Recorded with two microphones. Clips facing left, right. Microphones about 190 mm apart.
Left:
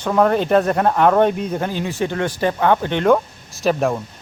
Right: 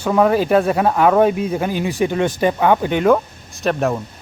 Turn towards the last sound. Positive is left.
turn(degrees=0)  # may be behind; listen again after turning